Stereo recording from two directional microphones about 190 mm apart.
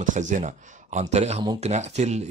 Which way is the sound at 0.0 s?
40° right (ahead or behind).